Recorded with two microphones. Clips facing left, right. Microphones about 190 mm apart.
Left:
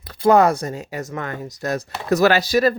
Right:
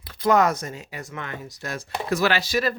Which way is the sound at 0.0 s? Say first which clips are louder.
Left 5 dB; 35° left (ahead or behind).